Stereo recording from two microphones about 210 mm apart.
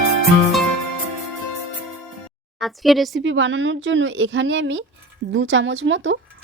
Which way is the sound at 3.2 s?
65° right (ahead or behind).